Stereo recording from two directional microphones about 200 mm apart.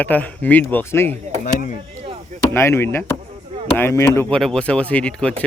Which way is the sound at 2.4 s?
15° left (ahead or behind).